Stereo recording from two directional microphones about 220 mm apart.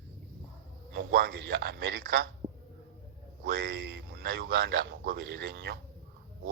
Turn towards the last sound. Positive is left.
turn(degrees=-50)  # may be behind; listen again after turning